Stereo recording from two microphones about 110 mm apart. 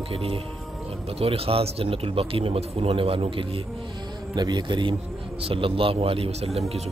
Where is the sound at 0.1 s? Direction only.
55° right (ahead or behind).